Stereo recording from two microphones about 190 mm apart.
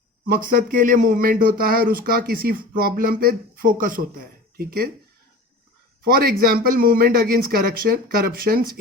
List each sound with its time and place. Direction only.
0.3 s speech: 45° right (ahead or behind)
6.1 s speech: 50° right (ahead or behind)